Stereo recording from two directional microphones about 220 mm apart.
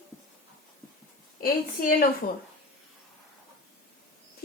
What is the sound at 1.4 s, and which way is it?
Speech, 40° left (ahead or behind).